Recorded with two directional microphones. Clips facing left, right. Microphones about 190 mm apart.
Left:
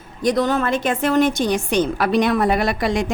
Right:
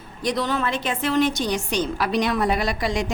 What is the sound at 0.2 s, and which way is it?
A woman's voice, 45° left (ahead or behind).